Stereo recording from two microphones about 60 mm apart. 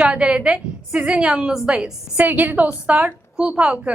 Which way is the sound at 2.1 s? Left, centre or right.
Right.